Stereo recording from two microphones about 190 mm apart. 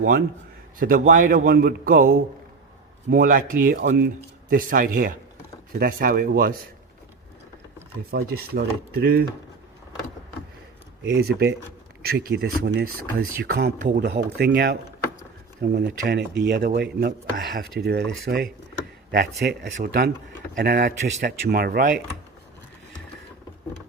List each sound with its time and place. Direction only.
0.8 s speech: 45° right (ahead or behind)
3.8 s speech: 60° right (ahead or behind)
8.1 s speech: 55° right (ahead or behind)
11.1 s speech: 60° right (ahead or behind)
19.1 s speech: 60° right (ahead or behind)